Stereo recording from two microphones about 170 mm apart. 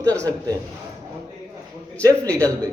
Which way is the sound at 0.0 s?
20° right (ahead or behind).